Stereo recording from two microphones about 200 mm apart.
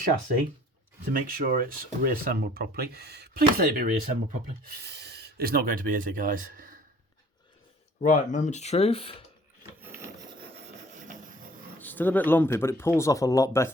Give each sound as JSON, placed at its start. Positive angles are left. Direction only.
{"t": 1.1, "sound": "speech", "side_deg": -45}
{"t": 7.9, "sound": "speech", "side_deg": 40}
{"t": 11.8, "sound": "speech", "side_deg": 10}